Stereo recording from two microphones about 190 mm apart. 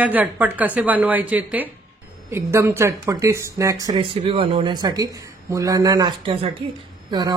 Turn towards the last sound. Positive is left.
turn(degrees=-20)  # may be behind; listen again after turning